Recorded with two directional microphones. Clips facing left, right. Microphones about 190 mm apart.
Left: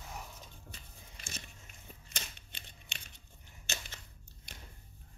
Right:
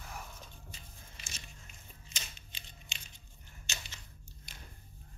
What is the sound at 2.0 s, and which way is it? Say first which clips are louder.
Typewriter: left 2 dB; 60° left (ahead or behind).